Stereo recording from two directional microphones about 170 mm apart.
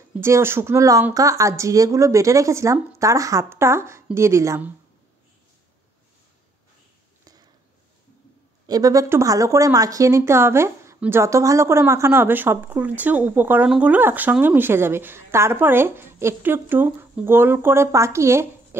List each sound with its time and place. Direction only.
0.2 s speech: 15° right (ahead or behind)
8.6 s speech: 20° right (ahead or behind)